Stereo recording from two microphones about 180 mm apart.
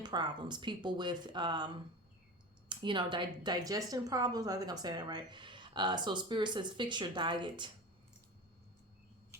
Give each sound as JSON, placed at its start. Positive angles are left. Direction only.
{"t": 0.0, "sound": "speech", "side_deg": -25}